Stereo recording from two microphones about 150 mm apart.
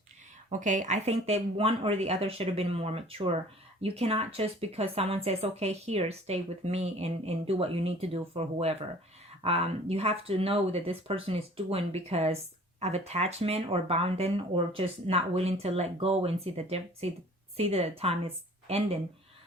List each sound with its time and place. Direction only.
0.5 s speech: 55° right (ahead or behind)